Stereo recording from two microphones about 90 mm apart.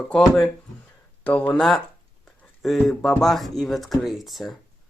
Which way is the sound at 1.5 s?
5° left (ahead or behind).